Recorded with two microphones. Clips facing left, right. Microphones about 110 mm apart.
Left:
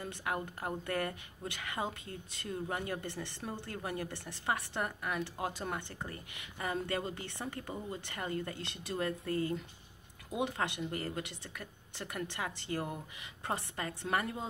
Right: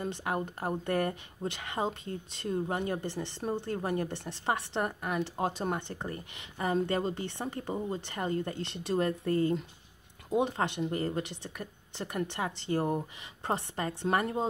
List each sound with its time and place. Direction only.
0.0 s speech: 25° right (ahead or behind)